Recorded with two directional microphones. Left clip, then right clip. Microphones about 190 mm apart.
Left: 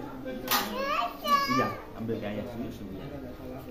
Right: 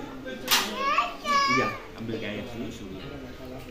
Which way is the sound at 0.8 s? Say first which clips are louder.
Right 3 dB; 60° left (ahead or behind).